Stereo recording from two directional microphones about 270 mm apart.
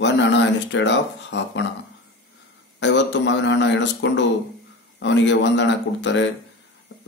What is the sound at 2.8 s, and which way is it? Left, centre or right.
Speech, left.